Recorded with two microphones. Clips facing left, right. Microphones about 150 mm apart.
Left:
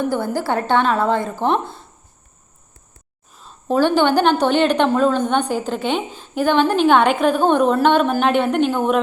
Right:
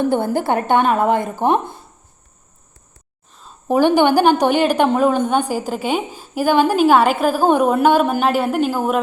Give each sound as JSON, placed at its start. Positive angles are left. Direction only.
{"t": 0.0, "sound": "a woman's voice", "side_deg": -25}
{"t": 3.7, "sound": "a woman's voice", "side_deg": -15}